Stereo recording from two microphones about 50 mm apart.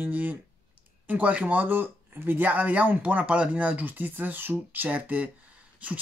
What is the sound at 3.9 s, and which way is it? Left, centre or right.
Speech, right.